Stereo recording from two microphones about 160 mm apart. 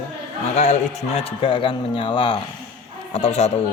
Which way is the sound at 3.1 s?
45° left (ahead or behind).